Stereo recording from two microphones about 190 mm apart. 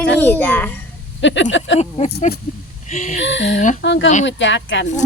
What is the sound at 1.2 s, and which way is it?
Speech, 75° left (ahead or behind).